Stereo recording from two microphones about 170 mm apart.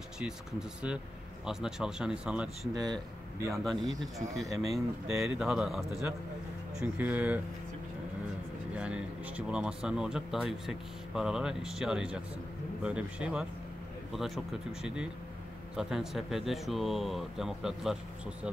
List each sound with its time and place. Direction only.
0.2 s speech: 5° right (ahead or behind)
2.7 s speech: 20° right (ahead or behind)
3.5 s speech: centre (ahead or behind)
8.7 s speech: 5° right (ahead or behind)